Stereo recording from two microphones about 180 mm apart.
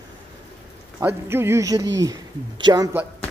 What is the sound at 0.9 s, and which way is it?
A woman's voice, 15° right (ahead or behind).